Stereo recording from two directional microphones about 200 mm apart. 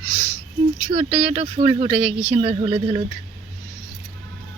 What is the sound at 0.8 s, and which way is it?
Speech, 30° right (ahead or behind).